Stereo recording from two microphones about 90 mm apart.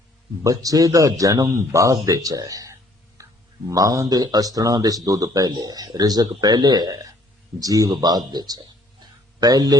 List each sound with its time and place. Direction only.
0.4 s a man's voice: 40° right (ahead or behind)
3.2 s a sound: 35° right (ahead or behind)
3.7 s a man's voice: 40° right (ahead or behind)